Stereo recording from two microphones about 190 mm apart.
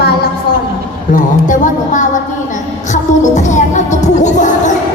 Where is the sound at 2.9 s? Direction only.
40° left (ahead or behind).